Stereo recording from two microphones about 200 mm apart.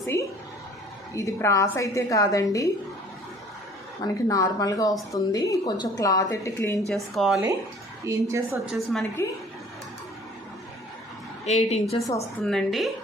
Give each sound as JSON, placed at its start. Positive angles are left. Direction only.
{"t": 0.0, "sound": "a sound", "side_deg": 15}
{"t": 1.1, "sound": "speech", "side_deg": 15}
{"t": 4.0, "sound": "speech", "side_deg": 15}
{"t": 6.8, "sound": "speech", "side_deg": 0}
{"t": 8.0, "sound": "a woman's voice", "side_deg": -15}
{"t": 8.6, "sound": "speech", "side_deg": 0}
{"t": 11.4, "sound": "a woman's voice", "side_deg": 30}
{"t": 12.4, "sound": "speech", "side_deg": 0}